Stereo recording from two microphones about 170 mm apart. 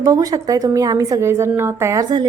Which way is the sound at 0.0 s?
20° right (ahead or behind).